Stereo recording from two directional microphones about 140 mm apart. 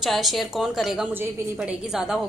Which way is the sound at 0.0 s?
Centre (ahead or behind).